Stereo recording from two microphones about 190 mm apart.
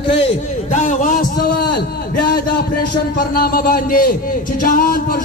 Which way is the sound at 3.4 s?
50° left (ahead or behind).